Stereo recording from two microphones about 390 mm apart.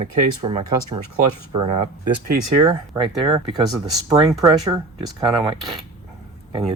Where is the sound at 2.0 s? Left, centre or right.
Centre.